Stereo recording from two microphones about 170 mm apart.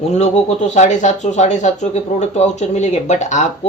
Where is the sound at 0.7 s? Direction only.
45° left (ahead or behind).